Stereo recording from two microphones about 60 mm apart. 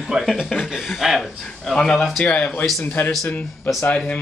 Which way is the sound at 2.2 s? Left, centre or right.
Centre.